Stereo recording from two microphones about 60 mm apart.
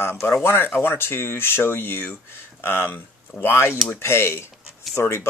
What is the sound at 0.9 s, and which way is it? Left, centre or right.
Speech, left.